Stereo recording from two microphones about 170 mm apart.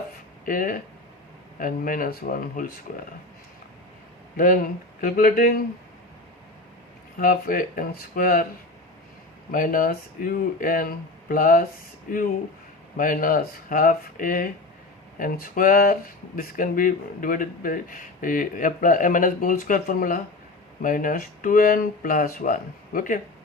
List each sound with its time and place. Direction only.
0.4 s speech: 55° left (ahead or behind)
4.4 s speech: 55° left (ahead or behind)
7.2 s speech: 55° left (ahead or behind)
9.5 s speech: 55° left (ahead or behind)